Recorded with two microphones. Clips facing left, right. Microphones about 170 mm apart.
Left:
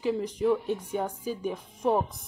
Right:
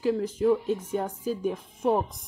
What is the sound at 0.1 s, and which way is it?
Speech, 5° right (ahead or behind).